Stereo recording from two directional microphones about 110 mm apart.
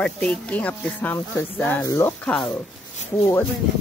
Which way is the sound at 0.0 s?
10° left (ahead or behind).